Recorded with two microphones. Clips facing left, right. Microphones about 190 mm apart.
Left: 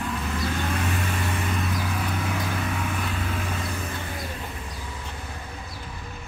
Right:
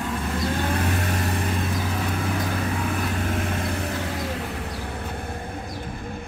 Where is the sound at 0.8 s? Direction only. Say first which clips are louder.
Right 3 dB; 40° right (ahead or behind).